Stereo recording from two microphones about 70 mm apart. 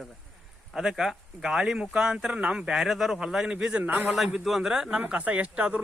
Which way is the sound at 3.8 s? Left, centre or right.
Right.